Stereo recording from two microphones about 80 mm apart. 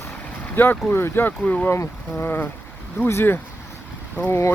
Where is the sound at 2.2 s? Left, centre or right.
Left.